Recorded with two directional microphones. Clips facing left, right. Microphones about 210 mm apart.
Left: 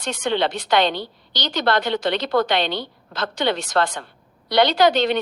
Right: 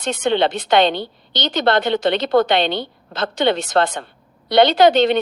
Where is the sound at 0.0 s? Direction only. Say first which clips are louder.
Right 4 dB; 25° right (ahead or behind).